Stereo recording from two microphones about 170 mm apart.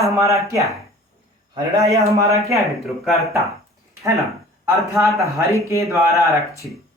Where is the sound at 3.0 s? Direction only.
Centre (ahead or behind).